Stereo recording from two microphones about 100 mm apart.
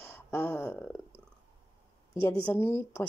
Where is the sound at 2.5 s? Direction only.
25° left (ahead or behind).